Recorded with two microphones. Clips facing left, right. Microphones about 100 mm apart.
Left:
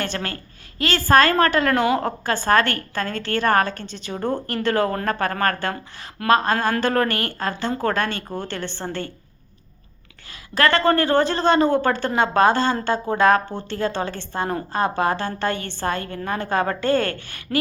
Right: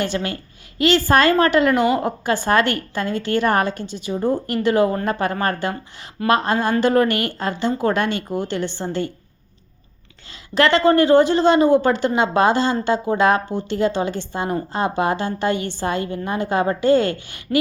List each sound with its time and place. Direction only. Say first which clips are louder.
0.8 s a woman's voice: right 1 dB; 20° right (ahead or behind)
10.5 s a woman's voice: right 3 dB; 20° right (ahead or behind)